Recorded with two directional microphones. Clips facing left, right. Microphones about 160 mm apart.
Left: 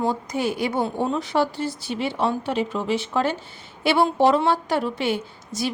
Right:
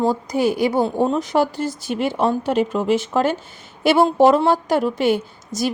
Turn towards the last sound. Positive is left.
turn(degrees=-40)  # may be behind; listen again after turning